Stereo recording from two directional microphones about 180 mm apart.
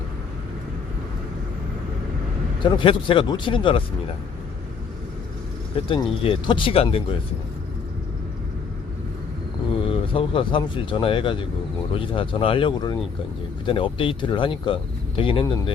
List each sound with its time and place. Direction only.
2.6 s speech: 30° left (ahead or behind)
5.7 s speech: 30° left (ahead or behind)
9.8 s speech: 30° left (ahead or behind)